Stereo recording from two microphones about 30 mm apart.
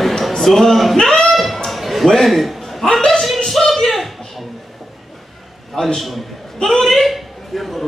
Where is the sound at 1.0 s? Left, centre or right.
Centre.